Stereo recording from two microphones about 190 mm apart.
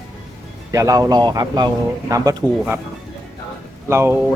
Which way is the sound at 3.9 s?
15° right (ahead or behind).